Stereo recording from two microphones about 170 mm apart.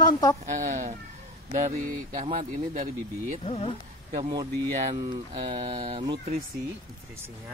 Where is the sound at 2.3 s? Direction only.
45° right (ahead or behind).